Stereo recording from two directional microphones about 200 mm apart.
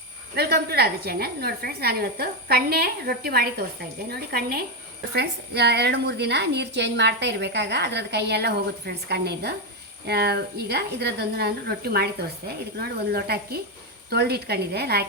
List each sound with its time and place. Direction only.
0.3 s a woman's voice: 50° right (ahead or behind)